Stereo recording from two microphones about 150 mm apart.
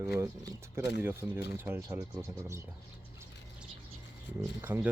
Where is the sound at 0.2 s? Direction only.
20° right (ahead or behind).